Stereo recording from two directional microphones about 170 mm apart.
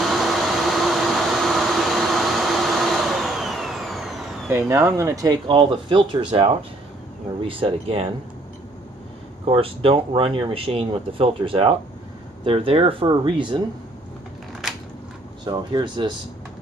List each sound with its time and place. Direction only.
0.0 s a sound: centre (ahead or behind)
4.5 s speech: 15° right (ahead or behind); by 8.1 s 35° right (ahead or behind)
9.5 s speech: 35° right (ahead or behind)
15.4 s speech: 25° right (ahead or behind)